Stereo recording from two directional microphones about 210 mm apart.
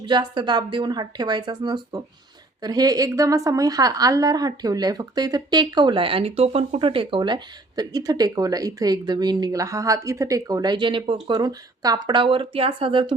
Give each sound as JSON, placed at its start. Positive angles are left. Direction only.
{"t": 0.0, "sound": "a woman's voice", "side_deg": -20}